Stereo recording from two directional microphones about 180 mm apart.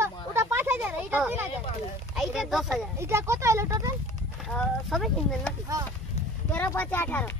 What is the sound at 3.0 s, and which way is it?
Speech, 15° right (ahead or behind).